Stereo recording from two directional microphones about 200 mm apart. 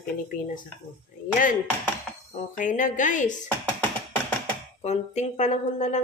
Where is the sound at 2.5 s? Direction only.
40° left (ahead or behind).